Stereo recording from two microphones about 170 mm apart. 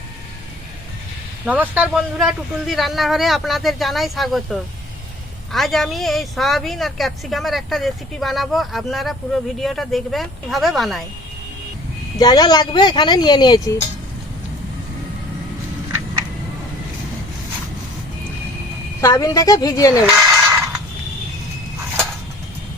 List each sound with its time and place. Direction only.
1.5 s speech: 10° right (ahead or behind)
12.2 s speech: 25° left (ahead or behind)
19.0 s speech: 20° left (ahead or behind)
20.0 s speech: 5° right (ahead or behind)
20.4 s a sound: 15° right (ahead or behind)